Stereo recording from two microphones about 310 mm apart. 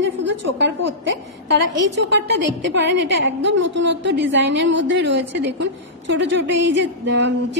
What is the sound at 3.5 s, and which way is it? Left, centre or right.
Speech, right.